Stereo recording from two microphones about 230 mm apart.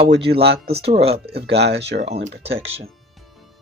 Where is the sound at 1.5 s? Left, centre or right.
Right.